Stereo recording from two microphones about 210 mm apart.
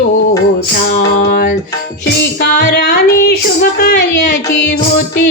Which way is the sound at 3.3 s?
50° left (ahead or behind).